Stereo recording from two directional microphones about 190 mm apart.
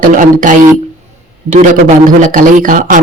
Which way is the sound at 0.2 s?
45° right (ahead or behind).